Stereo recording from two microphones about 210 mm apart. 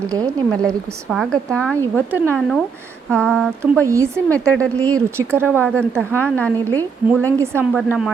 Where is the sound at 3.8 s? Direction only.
15° right (ahead or behind).